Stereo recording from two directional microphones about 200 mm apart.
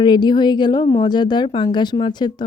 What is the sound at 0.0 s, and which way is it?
Speech, 20° left (ahead or behind).